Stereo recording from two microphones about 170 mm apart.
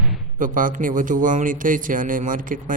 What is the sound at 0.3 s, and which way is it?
Speech, 50° right (ahead or behind).